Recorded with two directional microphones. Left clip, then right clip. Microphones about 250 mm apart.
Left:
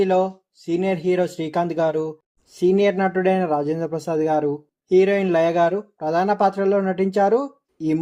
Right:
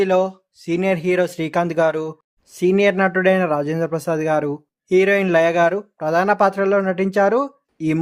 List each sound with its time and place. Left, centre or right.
0.0 s a man's voice: right